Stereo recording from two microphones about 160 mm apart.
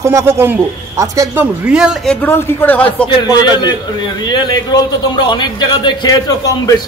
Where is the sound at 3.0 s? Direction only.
30° left (ahead or behind).